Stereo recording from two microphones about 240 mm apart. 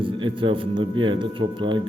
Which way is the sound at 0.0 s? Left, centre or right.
Right.